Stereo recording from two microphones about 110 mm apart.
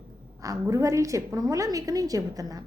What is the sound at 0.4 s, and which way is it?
A woman's voice, 30° right (ahead or behind).